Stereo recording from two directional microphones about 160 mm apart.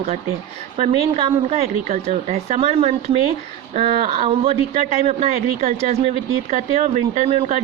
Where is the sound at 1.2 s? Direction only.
35° right (ahead or behind).